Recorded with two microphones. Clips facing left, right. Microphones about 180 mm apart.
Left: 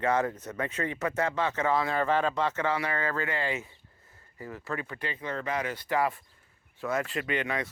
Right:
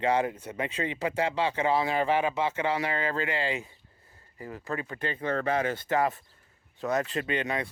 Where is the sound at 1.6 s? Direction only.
15° right (ahead or behind).